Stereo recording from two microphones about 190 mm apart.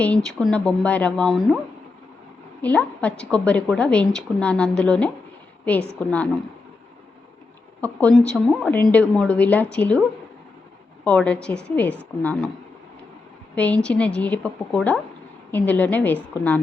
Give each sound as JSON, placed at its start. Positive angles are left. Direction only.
{"t": 0.0, "sound": "a woman's voice", "side_deg": 5}
{"t": 2.6, "sound": "a woman's voice", "side_deg": 10}
{"t": 7.8, "sound": "a woman's voice", "side_deg": 5}
{"t": 11.0, "sound": "a woman's voice", "side_deg": 5}
{"t": 13.6, "sound": "a woman's voice", "side_deg": 5}